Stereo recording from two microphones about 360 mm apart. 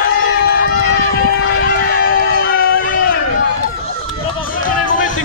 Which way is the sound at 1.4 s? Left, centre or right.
Left.